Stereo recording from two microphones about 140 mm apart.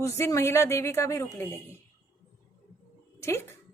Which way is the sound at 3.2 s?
15° left (ahead or behind).